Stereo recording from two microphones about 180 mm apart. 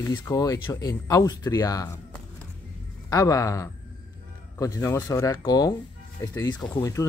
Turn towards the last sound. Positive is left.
turn(degrees=20)  # may be behind; listen again after turning